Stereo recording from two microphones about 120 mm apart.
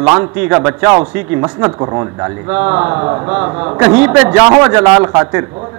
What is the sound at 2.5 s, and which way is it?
A man's voice, 15° right (ahead or behind).